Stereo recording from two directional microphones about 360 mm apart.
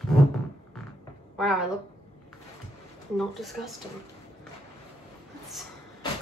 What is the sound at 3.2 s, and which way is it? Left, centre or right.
Speech, centre.